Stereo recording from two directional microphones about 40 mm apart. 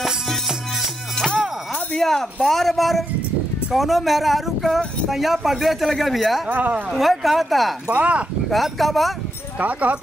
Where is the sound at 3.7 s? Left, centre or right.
Centre.